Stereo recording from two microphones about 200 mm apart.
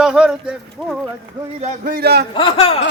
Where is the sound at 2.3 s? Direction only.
25° left (ahead or behind).